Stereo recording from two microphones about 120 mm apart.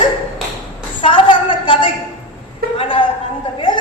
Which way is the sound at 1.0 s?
45° left (ahead or behind).